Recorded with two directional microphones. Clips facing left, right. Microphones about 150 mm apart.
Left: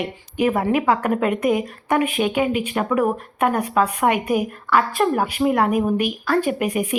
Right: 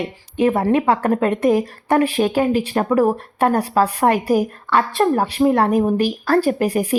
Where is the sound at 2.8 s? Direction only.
25° right (ahead or behind).